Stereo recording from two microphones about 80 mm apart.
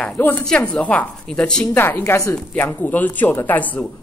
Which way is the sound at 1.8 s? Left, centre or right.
Left.